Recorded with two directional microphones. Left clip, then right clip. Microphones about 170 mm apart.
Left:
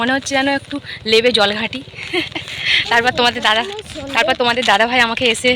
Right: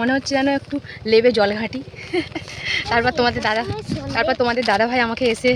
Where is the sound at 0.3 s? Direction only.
15° right (ahead or behind).